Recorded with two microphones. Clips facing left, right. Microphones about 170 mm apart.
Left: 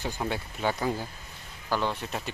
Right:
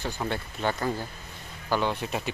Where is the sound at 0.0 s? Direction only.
10° left (ahead or behind).